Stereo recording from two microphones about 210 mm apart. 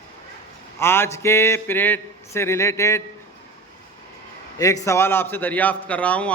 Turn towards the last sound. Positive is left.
turn(degrees=5)  # may be behind; listen again after turning